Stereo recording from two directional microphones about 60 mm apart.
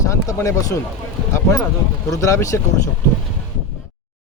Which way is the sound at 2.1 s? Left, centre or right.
Left.